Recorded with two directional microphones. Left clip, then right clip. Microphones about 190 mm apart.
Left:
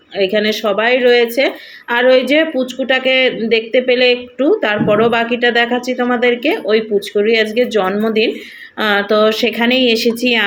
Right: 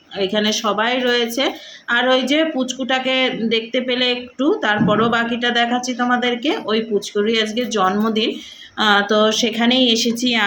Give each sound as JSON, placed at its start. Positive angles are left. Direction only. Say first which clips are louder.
{"t": 0.2, "sound": "speech", "louder": "left 5 dB", "side_deg": -10}